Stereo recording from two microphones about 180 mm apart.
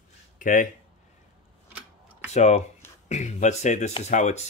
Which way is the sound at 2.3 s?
40° left (ahead or behind).